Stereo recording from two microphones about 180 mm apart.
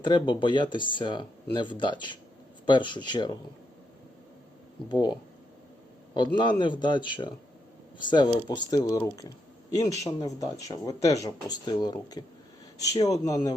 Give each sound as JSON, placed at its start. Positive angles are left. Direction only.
{"t": 0.0, "sound": "speech", "side_deg": 25}
{"t": 4.9, "sound": "speech", "side_deg": 20}
{"t": 6.1, "sound": "speech", "side_deg": 25}